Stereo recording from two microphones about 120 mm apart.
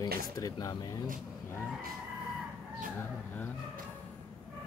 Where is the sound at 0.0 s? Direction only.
30° left (ahead or behind).